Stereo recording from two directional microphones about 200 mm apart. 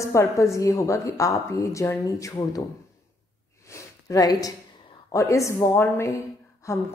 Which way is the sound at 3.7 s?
15° left (ahead or behind).